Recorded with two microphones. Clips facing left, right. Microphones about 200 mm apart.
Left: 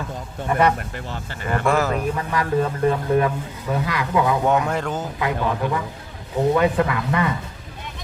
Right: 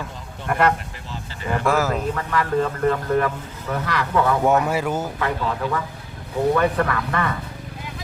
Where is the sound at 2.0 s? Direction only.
15° left (ahead or behind).